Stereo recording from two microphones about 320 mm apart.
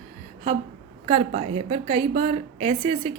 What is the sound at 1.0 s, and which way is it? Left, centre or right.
A woman's voice, centre.